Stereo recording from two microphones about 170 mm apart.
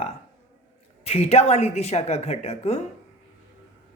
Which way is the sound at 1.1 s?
35° left (ahead or behind).